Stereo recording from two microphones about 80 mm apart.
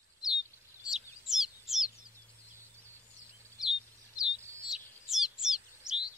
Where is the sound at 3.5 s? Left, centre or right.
Centre.